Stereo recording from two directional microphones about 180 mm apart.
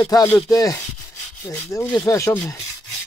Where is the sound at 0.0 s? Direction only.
15° left (ahead or behind).